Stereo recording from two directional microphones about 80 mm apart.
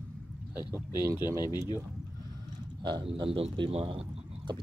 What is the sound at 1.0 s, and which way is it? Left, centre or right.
Speech, right.